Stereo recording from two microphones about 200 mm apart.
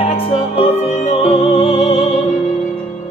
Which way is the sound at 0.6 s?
30° left (ahead or behind).